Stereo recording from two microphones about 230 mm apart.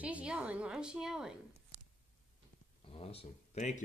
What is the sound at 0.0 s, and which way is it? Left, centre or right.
A woman's voice, centre.